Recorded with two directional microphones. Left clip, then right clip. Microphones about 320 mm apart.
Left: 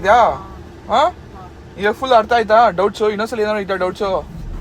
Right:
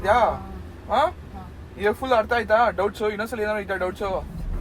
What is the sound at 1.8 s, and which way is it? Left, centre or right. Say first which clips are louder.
Speech: left 7 dB; left.